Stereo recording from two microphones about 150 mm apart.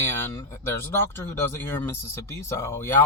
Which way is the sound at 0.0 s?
15° left (ahead or behind).